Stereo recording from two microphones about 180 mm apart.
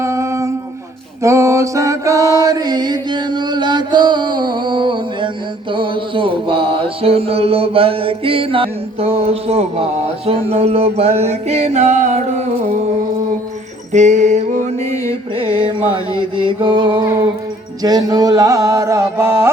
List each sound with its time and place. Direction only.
0.0 s a sound: 15° right (ahead or behind)
1.2 s music: 15° right (ahead or behind)
5.7 s mantra: 30° right (ahead or behind)
13.9 s mantra: 40° right (ahead or behind)
16.4 s mantra: 30° right (ahead or behind)
17.8 s music: 20° right (ahead or behind)